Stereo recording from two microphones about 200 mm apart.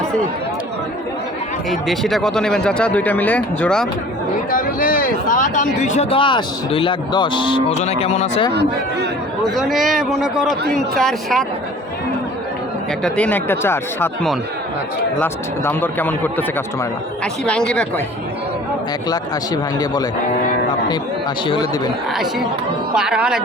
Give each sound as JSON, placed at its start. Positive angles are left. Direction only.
{"t": 1.7, "sound": "speech", "side_deg": 0}
{"t": 4.5, "sound": "speech", "side_deg": 45}
{"t": 9.4, "sound": "speech", "side_deg": 0}
{"t": 13.0, "sound": "speech", "side_deg": 5}
{"t": 17.7, "sound": "speech", "side_deg": 5}
{"t": 19.8, "sound": "speech", "side_deg": 20}
{"t": 21.4, "sound": "speech", "side_deg": 20}
{"t": 22.1, "sound": "speech", "side_deg": 0}